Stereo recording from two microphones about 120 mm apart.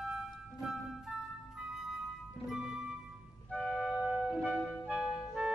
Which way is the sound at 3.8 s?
10° right (ahead or behind).